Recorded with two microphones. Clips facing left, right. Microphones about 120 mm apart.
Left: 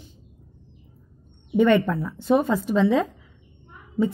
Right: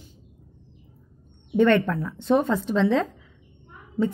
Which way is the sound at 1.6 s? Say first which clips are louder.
Left 1 dB; 10° left (ahead or behind).